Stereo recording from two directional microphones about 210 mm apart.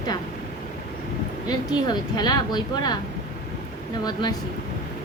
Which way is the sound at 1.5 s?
20° left (ahead or behind).